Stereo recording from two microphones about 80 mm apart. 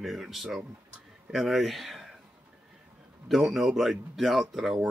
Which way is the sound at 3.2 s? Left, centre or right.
Centre.